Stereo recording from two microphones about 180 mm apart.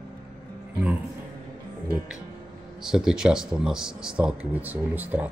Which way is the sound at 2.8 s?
5° right (ahead or behind).